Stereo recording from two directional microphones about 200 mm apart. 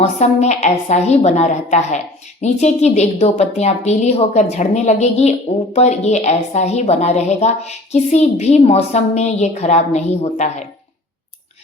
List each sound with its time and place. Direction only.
0.2 s a woman's voice: 35° left (ahead or behind)